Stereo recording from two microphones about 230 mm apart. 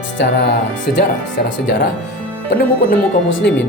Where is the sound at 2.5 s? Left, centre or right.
Left.